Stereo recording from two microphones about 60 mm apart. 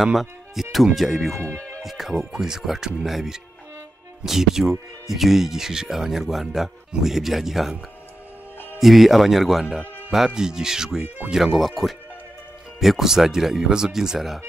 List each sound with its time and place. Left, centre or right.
0.0 s speech: centre
1.4 s speech: left
1.8 s speech: centre
8.7 s speech: centre